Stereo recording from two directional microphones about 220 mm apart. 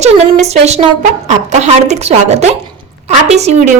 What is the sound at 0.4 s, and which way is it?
A woman's voice, 30° right (ahead or behind).